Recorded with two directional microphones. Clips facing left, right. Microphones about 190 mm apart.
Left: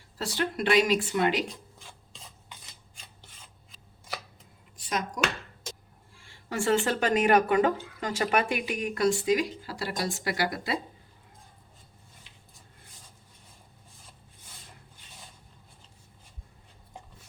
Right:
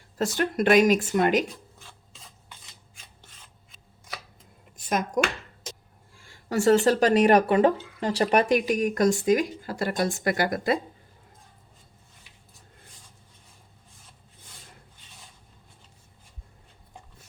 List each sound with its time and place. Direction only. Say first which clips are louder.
0.2 s speech: right 5 dB; 50° right (ahead or behind)
4.8 s speech: right 7 dB; 50° right (ahead or behind)
6.2 s speech: right 7 dB; 40° right (ahead or behind)